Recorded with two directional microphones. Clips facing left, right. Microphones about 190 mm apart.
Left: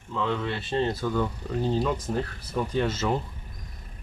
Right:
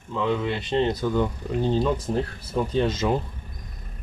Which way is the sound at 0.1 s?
15° right (ahead or behind).